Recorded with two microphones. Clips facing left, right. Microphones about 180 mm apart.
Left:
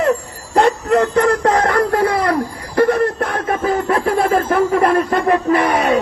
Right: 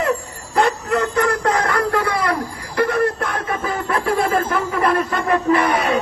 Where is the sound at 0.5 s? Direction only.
40° left (ahead or behind).